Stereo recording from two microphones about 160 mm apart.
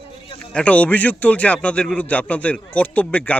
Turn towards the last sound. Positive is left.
turn(degrees=10)  # may be behind; listen again after turning